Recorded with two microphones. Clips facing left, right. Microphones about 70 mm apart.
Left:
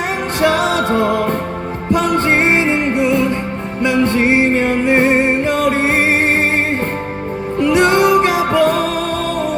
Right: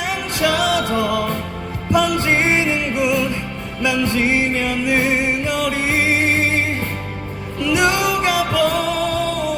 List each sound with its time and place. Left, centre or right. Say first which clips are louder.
0.4 s music: left 3 dB; left
7.6 s music: left 5 dB; left